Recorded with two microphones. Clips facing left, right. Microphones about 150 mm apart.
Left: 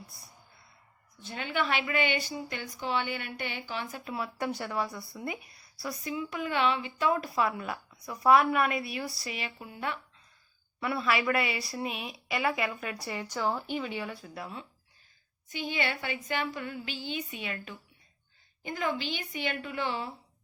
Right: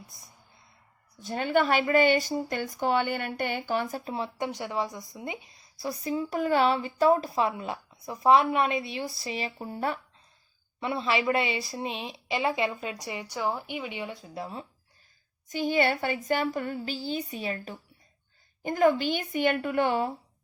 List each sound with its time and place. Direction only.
1.1 s speech: 40° right (ahead or behind)
4.0 s speech: 25° right (ahead or behind)
7.2 s speech: 25° right (ahead or behind)
10.8 s speech: 25° right (ahead or behind)
15.4 s speech: 45° right (ahead or behind)
18.6 s speech: 45° right (ahead or behind)